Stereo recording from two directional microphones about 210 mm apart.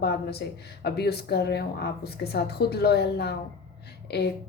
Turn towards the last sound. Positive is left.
turn(degrees=50)  # may be behind; listen again after turning